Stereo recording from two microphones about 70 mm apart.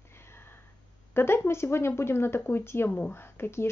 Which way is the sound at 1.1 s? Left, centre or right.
Left.